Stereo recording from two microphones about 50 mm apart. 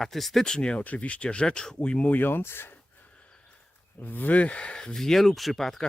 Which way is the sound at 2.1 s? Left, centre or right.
Left.